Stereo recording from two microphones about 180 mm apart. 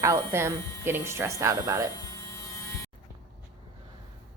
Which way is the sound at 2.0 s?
15° left (ahead or behind).